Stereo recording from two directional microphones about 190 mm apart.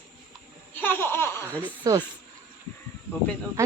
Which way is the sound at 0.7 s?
10° left (ahead or behind).